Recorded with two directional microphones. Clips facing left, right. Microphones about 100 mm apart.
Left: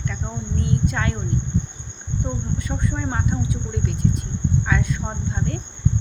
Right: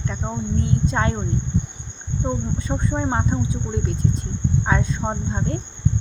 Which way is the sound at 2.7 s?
25° right (ahead or behind).